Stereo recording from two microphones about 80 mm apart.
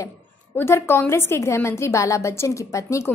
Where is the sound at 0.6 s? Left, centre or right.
Left.